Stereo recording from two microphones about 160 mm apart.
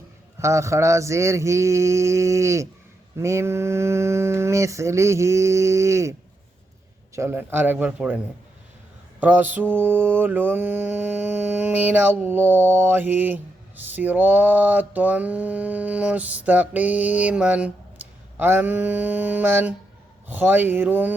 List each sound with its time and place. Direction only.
0.3 s a sound: 20° right (ahead or behind)
3.2 s mantra: 15° right (ahead or behind)
7.2 s mantra: 15° right (ahead or behind)
9.2 s mantra: 10° right (ahead or behind)